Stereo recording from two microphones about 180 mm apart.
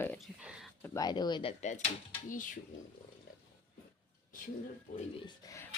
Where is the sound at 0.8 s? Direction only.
15° left (ahead or behind); by 2.6 s 45° left (ahead or behind).